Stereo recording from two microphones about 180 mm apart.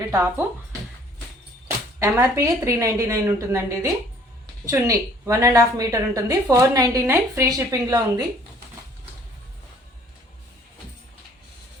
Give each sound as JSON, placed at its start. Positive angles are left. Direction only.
{"t": 0.1, "sound": "a woman's voice", "side_deg": -15}